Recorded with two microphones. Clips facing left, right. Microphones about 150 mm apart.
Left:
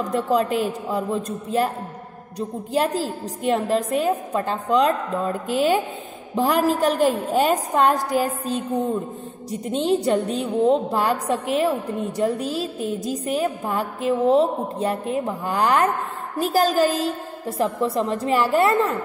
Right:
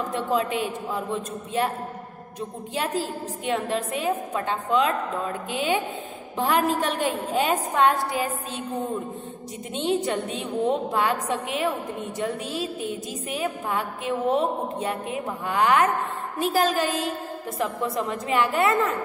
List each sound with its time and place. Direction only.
0.1 s a woman's voice: 40° left (ahead or behind)
2.7 s a woman's voice: 35° left (ahead or behind)